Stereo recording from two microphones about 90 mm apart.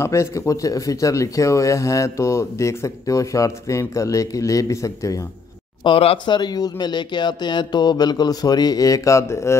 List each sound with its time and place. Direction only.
0.0 s speech: 35° left (ahead or behind)
5.9 s speech: 80° left
6.3 s speech: 50° left (ahead or behind); by 9.6 s 30° left (ahead or behind)